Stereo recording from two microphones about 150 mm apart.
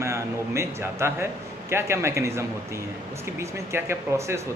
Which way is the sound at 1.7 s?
15° right (ahead or behind).